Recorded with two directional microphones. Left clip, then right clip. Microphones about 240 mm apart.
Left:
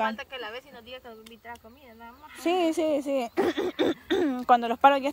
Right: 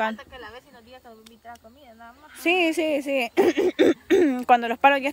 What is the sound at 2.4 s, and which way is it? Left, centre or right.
Speech, centre.